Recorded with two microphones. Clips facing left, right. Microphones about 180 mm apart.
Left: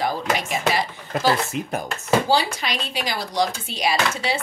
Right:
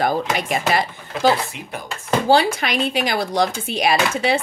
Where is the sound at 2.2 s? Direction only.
55° right (ahead or behind).